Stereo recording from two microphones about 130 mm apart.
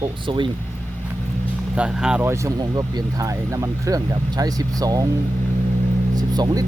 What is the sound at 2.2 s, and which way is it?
Speech, 25° right (ahead or behind).